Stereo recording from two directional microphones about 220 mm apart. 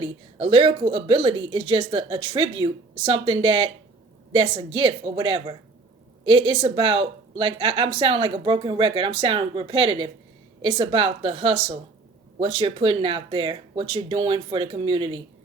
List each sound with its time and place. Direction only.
0.0 s speech: 25° right (ahead or behind)